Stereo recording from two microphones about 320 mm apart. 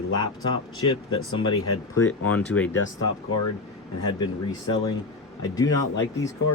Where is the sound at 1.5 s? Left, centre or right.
Left.